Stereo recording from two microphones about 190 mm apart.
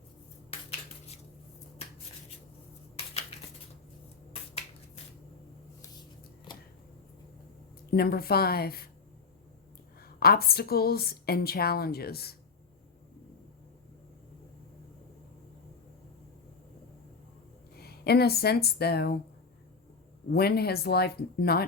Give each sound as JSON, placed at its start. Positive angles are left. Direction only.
{"t": 2.9, "sound": "a sound", "side_deg": 30}
{"t": 5.8, "sound": "shuffling cards", "side_deg": 25}
{"t": 7.9, "sound": "a woman's voice", "side_deg": 55}
{"t": 10.0, "sound": "a woman's voice", "side_deg": 55}
{"t": 17.7, "sound": "speech", "side_deg": 55}
{"t": 20.3, "sound": "a woman's voice", "side_deg": 55}